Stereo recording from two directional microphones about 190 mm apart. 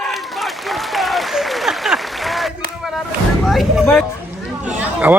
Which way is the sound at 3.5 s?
Centre (ahead or behind).